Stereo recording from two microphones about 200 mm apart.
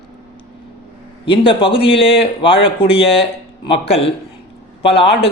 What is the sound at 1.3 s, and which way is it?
A man's voice, 25° left (ahead or behind).